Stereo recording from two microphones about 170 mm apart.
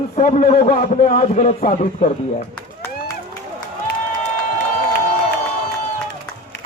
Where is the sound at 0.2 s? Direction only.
50° left (ahead or behind).